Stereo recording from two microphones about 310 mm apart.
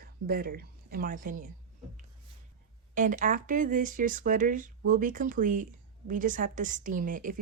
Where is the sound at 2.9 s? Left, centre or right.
Right.